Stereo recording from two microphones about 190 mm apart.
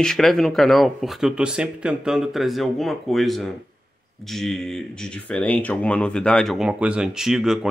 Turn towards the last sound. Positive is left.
turn(degrees=0)  # may be behind; listen again after turning